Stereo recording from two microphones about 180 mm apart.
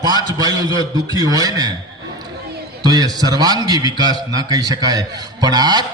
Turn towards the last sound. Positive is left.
turn(degrees=-25)  # may be behind; listen again after turning